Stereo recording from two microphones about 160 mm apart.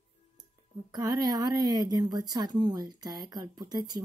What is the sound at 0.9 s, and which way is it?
A woman's voice, 25° right (ahead or behind).